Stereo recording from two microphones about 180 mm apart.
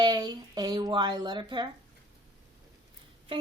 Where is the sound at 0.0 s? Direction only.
20° right (ahead or behind).